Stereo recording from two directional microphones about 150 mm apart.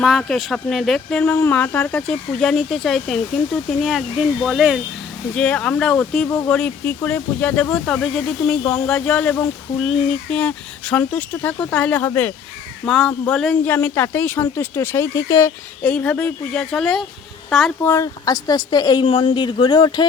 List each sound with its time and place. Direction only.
0.0 s speech: centre (ahead or behind); by 15.5 s 20° left (ahead or behind)
15.8 s speech: 10° left (ahead or behind)
17.8 s a woman's voice: 20° left (ahead or behind)